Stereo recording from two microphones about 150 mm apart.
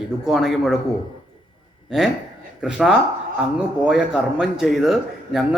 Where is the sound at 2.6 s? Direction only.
5° right (ahead or behind).